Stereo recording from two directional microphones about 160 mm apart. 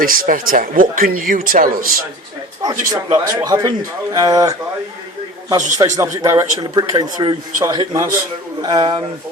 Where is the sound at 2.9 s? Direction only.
25° right (ahead or behind).